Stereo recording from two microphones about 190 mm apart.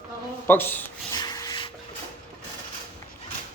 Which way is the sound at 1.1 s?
20° left (ahead or behind).